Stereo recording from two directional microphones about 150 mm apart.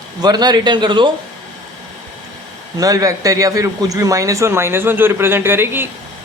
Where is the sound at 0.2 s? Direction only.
25° right (ahead or behind).